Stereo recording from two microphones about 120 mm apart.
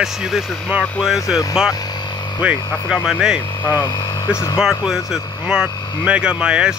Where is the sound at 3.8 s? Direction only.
35° left (ahead or behind).